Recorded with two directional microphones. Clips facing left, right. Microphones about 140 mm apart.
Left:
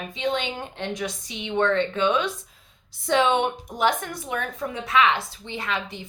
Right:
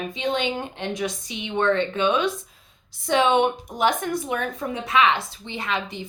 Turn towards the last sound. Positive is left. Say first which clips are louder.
# right 2 dB
turn(degrees=-20)  # may be behind; listen again after turning